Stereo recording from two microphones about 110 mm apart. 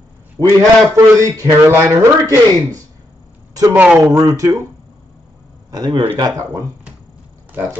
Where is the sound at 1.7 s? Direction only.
30° right (ahead or behind).